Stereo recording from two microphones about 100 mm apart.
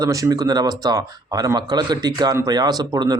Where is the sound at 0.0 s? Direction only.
35° right (ahead or behind).